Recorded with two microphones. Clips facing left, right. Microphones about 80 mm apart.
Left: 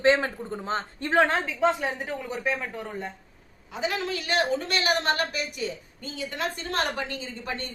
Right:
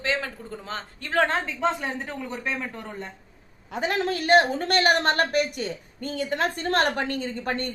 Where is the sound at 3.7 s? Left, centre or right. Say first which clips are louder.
Right 3 dB; right.